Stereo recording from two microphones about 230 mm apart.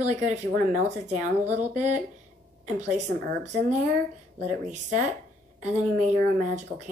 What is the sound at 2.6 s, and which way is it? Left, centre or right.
Speech, right.